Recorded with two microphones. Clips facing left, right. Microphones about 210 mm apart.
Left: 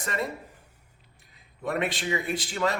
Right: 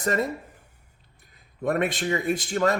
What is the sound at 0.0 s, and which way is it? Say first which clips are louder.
Speech: right 6 dB; 45° right (ahead or behind).